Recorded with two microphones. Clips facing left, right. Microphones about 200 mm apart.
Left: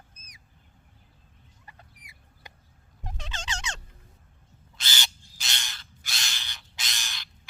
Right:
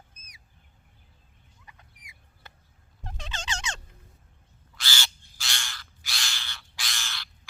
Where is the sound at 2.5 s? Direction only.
15° left (ahead or behind).